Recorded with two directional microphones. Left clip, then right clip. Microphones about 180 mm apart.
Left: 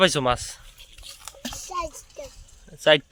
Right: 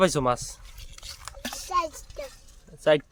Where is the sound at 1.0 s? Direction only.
20° right (ahead or behind).